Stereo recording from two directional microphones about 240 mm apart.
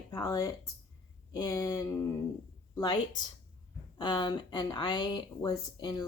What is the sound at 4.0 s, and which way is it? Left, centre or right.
Speech, centre.